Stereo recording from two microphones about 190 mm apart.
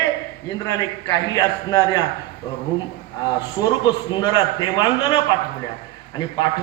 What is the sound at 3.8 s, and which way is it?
A man's voice, 20° left (ahead or behind).